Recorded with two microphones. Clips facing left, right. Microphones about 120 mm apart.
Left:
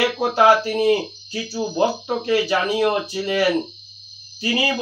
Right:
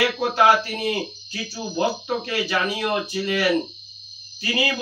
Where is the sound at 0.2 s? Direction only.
30° left (ahead or behind).